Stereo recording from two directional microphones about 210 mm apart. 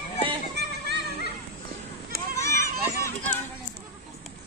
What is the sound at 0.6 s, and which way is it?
Music, 50° right (ahead or behind).